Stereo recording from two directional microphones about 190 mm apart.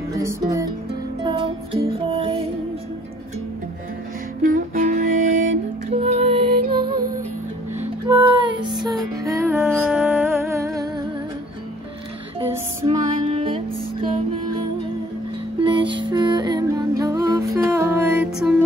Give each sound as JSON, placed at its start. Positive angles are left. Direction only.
{"t": 0.1, "sound": "music", "side_deg": -15}
{"t": 1.2, "sound": "music", "side_deg": -30}
{"t": 4.4, "sound": "music", "side_deg": -40}
{"t": 8.2, "sound": "music", "side_deg": -25}
{"t": 12.4, "sound": "music", "side_deg": -25}